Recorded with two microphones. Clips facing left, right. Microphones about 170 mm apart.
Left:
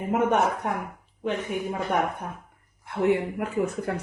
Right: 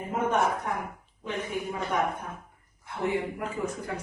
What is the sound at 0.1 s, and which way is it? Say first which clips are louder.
Speech: left 4 dB; 70° left (ahead or behind).